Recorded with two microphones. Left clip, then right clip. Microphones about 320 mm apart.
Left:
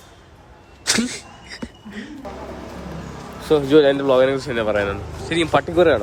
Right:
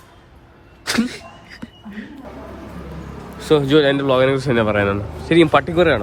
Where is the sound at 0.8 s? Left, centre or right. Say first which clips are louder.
Even; centre.